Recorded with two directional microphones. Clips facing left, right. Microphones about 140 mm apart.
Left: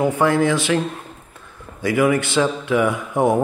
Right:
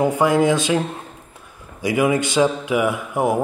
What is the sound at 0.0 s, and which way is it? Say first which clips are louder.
Speech: right 1 dB; 15° right (ahead or behind).